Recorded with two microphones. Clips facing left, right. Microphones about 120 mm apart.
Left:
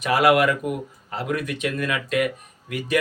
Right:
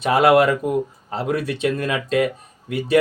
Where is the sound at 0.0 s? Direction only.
25° right (ahead or behind).